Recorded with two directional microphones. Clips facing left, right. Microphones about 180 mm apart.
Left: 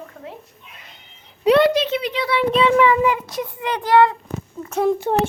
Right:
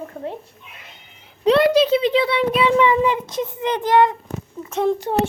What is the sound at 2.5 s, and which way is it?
A child's voice, 15° right (ahead or behind).